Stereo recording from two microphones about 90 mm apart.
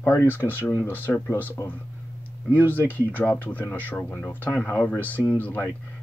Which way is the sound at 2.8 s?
20° left (ahead or behind).